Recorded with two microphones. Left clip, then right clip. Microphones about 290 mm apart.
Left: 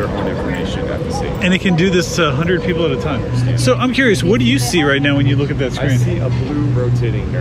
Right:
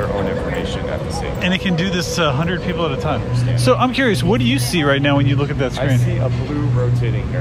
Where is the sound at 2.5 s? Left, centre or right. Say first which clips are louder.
Left 5 dB; centre.